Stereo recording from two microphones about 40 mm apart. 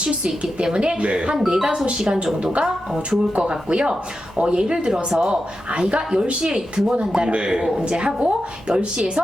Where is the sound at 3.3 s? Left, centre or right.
Right.